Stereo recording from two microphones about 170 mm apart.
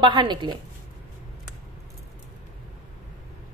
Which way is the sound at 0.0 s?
25° right (ahead or behind).